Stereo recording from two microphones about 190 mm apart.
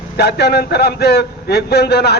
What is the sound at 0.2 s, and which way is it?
A man's voice, 60° left (ahead or behind).